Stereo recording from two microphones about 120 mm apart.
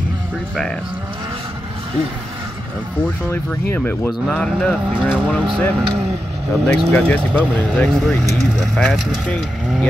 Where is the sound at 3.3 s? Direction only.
20° left (ahead or behind).